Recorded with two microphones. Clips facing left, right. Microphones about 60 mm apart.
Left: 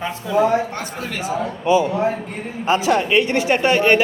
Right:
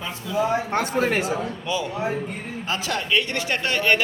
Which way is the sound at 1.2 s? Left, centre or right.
Left.